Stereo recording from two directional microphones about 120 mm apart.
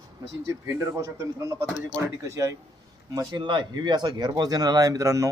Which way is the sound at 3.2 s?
40° right (ahead or behind).